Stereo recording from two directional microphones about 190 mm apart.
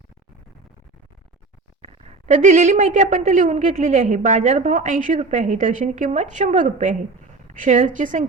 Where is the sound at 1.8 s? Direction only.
35° right (ahead or behind).